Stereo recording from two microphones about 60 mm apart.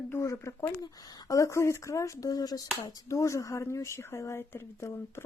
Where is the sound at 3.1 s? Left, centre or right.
Left.